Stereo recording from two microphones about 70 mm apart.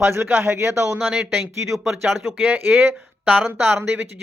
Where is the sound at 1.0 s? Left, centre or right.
Right.